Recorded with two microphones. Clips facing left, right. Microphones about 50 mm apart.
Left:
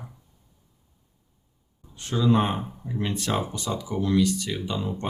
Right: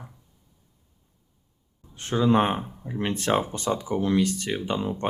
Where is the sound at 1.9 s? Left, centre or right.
Right.